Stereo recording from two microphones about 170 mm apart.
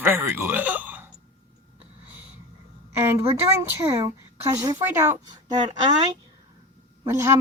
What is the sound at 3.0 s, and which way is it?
A woman's voice, 15° right (ahead or behind).